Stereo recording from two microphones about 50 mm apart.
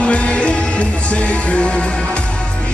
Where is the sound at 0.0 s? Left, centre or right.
Left.